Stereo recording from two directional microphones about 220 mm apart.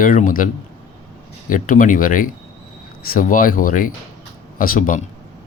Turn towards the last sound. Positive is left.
turn(degrees=40)  # may be behind; listen again after turning